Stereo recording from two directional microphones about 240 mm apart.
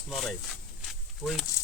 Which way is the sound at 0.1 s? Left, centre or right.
Centre.